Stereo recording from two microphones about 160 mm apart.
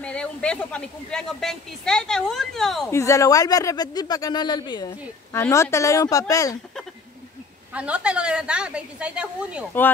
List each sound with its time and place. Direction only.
0.0 s speech: 5° left (ahead or behind)
2.9 s speech: 20° left (ahead or behind)
7.7 s a woman's voice: 10° right (ahead or behind)